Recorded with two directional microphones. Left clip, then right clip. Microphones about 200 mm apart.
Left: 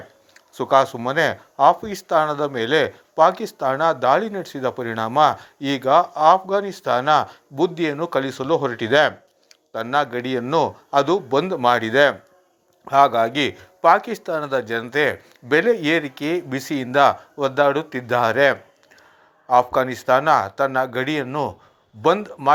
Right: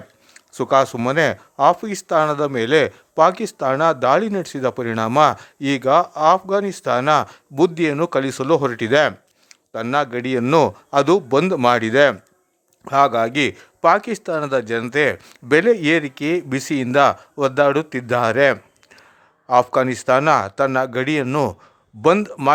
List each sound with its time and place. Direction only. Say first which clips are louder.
0.3 s a man's voice: right 1 dB; 35° right (ahead or behind)